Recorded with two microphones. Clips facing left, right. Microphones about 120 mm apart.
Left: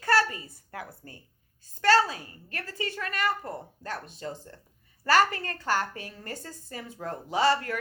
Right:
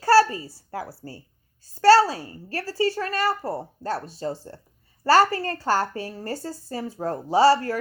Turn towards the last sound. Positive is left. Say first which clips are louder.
# right 7 dB
turn(degrees=-35)  # may be behind; listen again after turning